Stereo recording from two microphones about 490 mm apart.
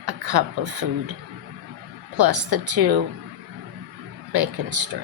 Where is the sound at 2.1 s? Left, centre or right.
Right.